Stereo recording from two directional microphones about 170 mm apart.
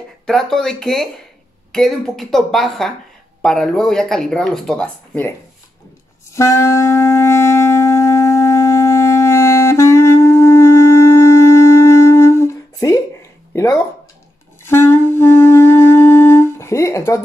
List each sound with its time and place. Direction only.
0.3 s speech: 5° left (ahead or behind)
6.3 s wind instrument: 15° left (ahead or behind)
13.5 s speech: 15° left (ahead or behind)
14.6 s music: 15° left (ahead or behind)